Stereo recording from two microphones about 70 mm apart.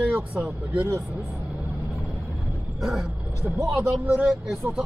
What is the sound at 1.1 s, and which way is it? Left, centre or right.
Vehicle, centre.